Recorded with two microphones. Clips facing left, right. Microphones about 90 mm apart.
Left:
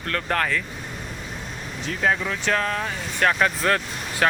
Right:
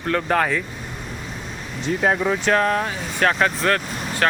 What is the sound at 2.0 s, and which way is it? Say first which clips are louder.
Speech: right 3 dB; 25° right (ahead or behind).